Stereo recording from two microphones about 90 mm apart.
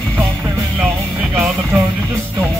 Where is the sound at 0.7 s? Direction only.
15° right (ahead or behind).